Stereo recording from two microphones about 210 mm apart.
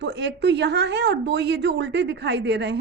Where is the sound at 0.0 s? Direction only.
55° right (ahead or behind).